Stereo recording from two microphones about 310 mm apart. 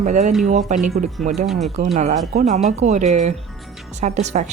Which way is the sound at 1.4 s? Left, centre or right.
Centre.